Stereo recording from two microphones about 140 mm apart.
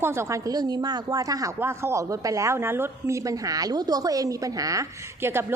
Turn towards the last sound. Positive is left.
turn(degrees=-15)  # may be behind; listen again after turning